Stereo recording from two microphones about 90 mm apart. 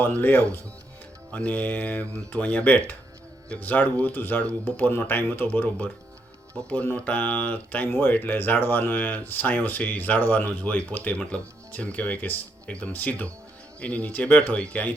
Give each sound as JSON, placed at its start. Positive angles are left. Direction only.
{"t": 0.0, "sound": "speech", "side_deg": 20}